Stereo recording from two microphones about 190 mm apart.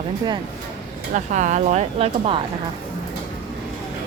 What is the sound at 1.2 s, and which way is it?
Speech, 40° right (ahead or behind).